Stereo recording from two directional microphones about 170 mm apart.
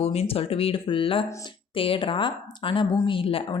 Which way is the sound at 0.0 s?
35° left (ahead or behind).